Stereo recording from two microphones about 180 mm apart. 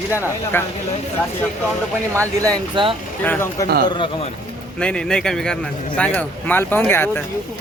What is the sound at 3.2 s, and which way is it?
Speech, 10° left (ahead or behind).